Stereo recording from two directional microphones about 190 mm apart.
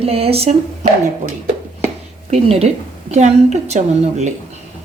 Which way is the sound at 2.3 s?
35° right (ahead or behind).